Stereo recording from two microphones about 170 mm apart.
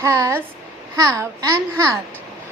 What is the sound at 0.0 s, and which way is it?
A woman's voice, 15° right (ahead or behind).